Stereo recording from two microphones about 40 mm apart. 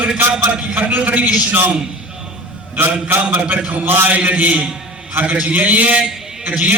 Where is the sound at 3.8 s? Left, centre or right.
Right.